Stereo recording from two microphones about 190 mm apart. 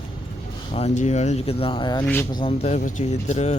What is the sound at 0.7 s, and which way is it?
Speech, 35° left (ahead or behind).